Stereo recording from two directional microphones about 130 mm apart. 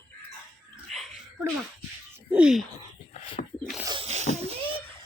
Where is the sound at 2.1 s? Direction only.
10° right (ahead or behind).